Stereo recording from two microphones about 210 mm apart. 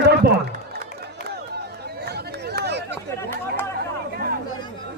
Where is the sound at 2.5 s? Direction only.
50° right (ahead or behind).